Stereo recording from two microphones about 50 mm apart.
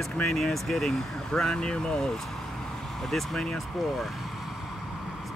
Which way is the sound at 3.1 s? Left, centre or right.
Centre.